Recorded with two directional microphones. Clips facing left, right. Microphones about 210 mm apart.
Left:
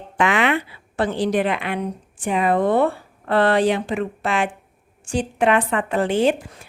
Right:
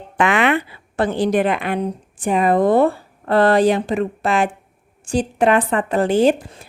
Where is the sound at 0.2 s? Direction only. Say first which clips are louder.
Right 2 dB; 50° right (ahead or behind).